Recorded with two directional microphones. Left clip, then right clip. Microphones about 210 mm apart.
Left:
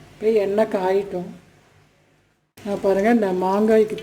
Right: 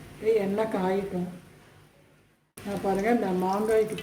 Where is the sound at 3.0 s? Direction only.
50° left (ahead or behind).